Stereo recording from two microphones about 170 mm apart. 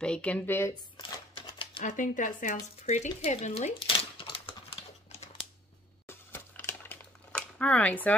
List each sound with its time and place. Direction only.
0.0 s speech: 5° left (ahead or behind)
1.3 s typewriter: 30° left (ahead or behind)
1.8 s speech: 50° left (ahead or behind); by 4.4 s 30° left (ahead or behind)
6.0 s a sound: 10° left (ahead or behind)